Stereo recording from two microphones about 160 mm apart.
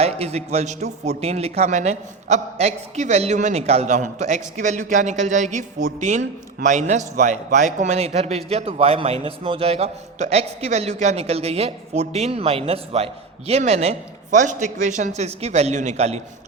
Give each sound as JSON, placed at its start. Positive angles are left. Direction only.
{"t": 0.0, "sound": "a man's voice", "side_deg": -40}